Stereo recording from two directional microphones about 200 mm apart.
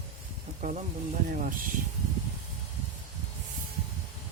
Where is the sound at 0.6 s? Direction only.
35° right (ahead or behind).